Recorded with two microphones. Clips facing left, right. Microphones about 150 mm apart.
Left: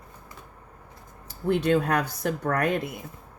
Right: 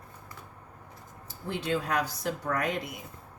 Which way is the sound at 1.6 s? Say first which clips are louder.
Left 3 dB; 60° left (ahead or behind).